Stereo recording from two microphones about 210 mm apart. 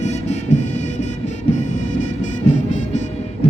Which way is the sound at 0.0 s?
35° left (ahead or behind).